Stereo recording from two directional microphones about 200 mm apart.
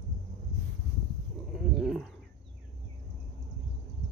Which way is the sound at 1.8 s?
5° right (ahead or behind).